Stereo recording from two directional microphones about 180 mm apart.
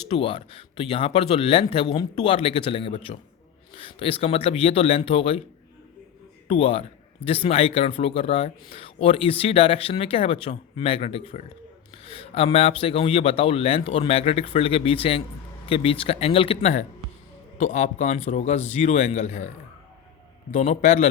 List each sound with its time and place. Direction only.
0.1 s speech: 30° left (ahead or behind)
6.5 s a man's voice: 30° left (ahead or behind)